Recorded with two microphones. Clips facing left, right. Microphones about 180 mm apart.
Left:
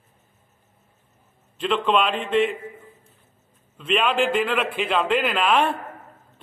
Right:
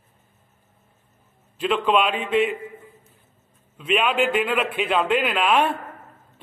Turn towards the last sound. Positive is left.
turn(degrees=-5)  # may be behind; listen again after turning